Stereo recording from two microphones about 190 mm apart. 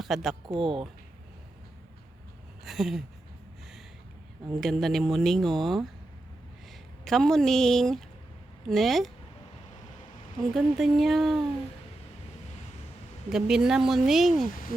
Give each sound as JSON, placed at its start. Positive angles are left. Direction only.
{"t": 0.0, "sound": "speech", "side_deg": 0}
{"t": 0.4, "sound": "speech", "side_deg": -25}
{"t": 2.6, "sound": "a sound", "side_deg": 0}
{"t": 4.6, "sound": "speech", "side_deg": 0}
{"t": 10.5, "sound": "speech", "side_deg": 0}
{"t": 13.3, "sound": "speech", "side_deg": 0}
{"t": 14.4, "sound": "speech", "side_deg": 45}